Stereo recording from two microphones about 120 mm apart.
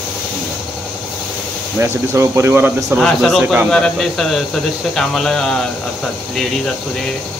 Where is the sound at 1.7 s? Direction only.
20° right (ahead or behind).